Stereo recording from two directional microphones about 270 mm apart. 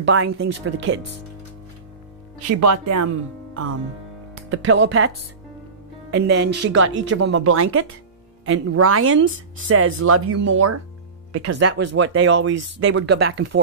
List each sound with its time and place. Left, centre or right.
0.0 s speech: right
2.4 s speech: right
3.1 s a woman's voice: right
11.7 s speech: right
12.5 s speech: right
12.8 s speech: right